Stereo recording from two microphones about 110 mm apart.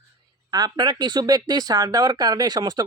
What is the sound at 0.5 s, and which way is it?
Speech, 40° right (ahead or behind).